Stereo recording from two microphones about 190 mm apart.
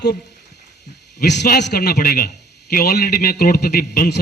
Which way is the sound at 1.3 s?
65° left (ahead or behind).